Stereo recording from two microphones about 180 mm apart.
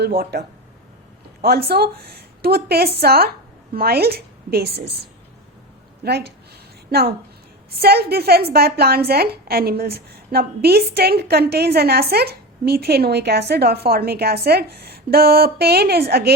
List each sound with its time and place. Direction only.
0.0 s a woman's voice: 60° right (ahead or behind)